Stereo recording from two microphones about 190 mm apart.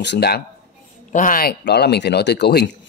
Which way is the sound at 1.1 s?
45° left (ahead or behind).